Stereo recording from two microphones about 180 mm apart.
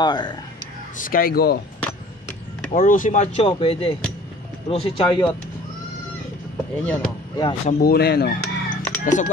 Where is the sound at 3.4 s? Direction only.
30° left (ahead or behind).